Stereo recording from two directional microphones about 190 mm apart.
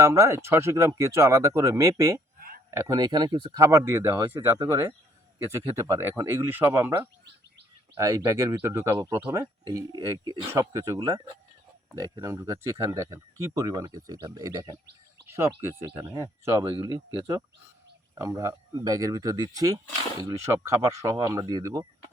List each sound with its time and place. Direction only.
0.0 s speech: 15° right (ahead or behind)